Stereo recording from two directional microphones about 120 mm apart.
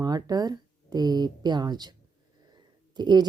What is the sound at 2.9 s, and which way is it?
Speech, 40° right (ahead or behind).